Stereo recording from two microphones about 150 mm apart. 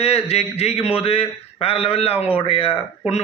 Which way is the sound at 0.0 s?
45° left (ahead or behind).